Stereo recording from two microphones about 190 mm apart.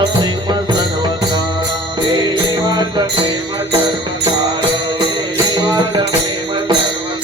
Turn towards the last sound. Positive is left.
turn(degrees=-20)  # may be behind; listen again after turning